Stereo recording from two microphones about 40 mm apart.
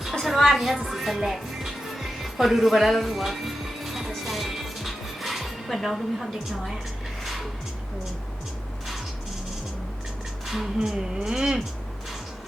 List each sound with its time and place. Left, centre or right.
0.0 s a woman's voice: centre
0.9 s music: centre
4.2 s dishes: centre
10.4 s a sound: centre
10.8 s speech: centre